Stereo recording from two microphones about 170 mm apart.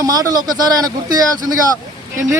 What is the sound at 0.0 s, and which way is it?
Speech, 20° right (ahead or behind).